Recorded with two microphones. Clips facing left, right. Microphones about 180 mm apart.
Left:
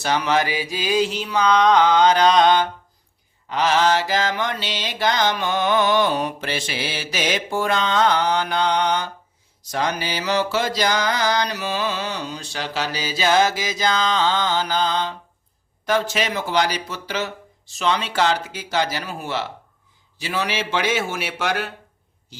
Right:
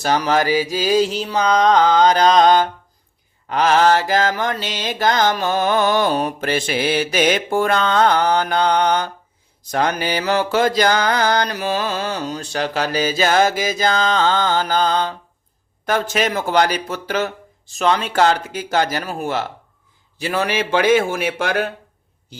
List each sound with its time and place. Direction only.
0.0 s mantra: 40° right (ahead or behind)